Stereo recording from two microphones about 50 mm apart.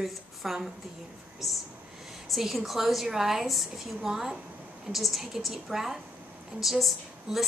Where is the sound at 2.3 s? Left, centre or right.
Centre.